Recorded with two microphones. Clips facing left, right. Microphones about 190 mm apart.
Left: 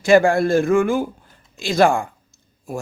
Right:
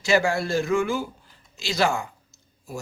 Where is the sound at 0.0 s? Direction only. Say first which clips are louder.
Left 8 dB; 55° left (ahead or behind).